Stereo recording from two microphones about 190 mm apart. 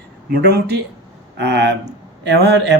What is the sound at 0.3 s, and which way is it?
A man's voice, 55° right (ahead or behind).